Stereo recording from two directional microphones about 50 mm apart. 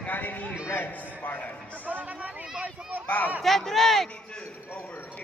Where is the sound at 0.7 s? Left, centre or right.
Left.